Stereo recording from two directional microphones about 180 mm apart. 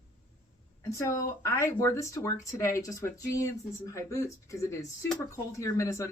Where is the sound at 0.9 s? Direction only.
15° left (ahead or behind).